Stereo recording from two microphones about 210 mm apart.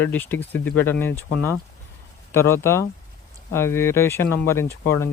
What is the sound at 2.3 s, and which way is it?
Speech, 10° left (ahead or behind).